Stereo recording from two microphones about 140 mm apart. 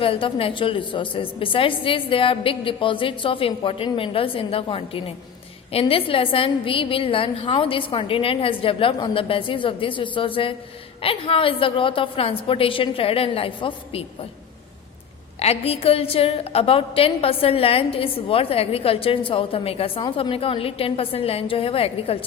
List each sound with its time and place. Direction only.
0.0 s a woman's voice: 40° left (ahead or behind)
15.4 s a woman's voice: 45° left (ahead or behind)